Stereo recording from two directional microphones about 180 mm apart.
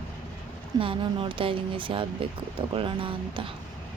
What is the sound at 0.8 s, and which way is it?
A woman's voice, 30° right (ahead or behind).